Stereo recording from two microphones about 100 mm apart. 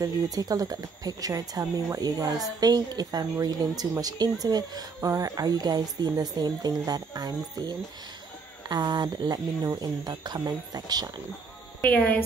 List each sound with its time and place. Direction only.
0.0 s speech: 40° right (ahead or behind)
11.8 s speech: 15° left (ahead or behind)